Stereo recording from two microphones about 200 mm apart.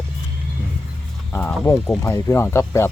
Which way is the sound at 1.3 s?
10° left (ahead or behind).